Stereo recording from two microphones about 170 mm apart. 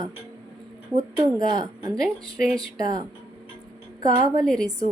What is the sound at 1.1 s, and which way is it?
A woman's voice, 25° right (ahead or behind).